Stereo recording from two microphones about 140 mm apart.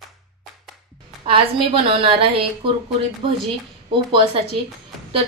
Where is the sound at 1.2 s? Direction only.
40° right (ahead or behind).